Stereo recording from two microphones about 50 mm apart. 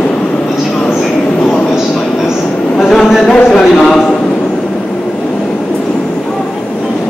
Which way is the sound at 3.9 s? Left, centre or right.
Centre.